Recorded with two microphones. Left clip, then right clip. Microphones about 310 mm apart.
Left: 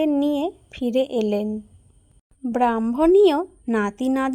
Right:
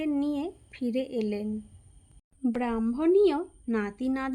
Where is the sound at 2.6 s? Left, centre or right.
Left.